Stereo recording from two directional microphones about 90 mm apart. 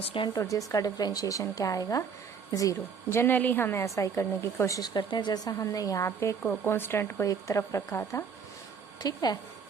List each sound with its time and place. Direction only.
0.0 s speech: 75° left (ahead or behind)
0.3 s speech: 40° left (ahead or behind)
3.2 s a woman's voice: 20° left (ahead or behind)
4.8 s a woman's voice: 55° left (ahead or behind); by 7.3 s 25° left (ahead or behind)
7.3 s speech: 40° left (ahead or behind)
9.0 s speech: 50° left (ahead or behind)